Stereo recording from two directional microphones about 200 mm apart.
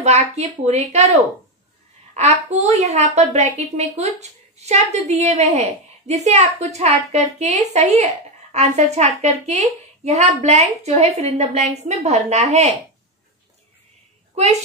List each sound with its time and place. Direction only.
0.0 s a woman's voice: 35° right (ahead or behind)
2.1 s a woman's voice: 35° right (ahead or behind)